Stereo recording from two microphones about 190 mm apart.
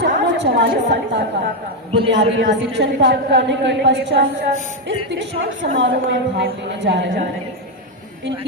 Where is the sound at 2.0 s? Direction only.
70° right (ahead or behind).